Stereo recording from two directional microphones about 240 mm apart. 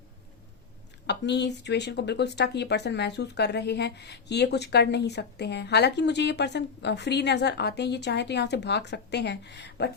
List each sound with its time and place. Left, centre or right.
1.0 s speech: left